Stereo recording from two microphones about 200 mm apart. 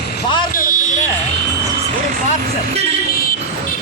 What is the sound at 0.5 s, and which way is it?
Fire alarm, 45° left (ahead or behind).